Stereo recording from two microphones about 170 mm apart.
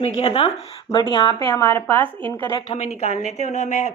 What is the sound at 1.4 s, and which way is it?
Speech, 15° left (ahead or behind).